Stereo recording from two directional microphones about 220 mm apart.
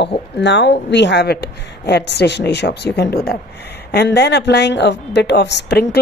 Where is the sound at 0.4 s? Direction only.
50° left (ahead or behind).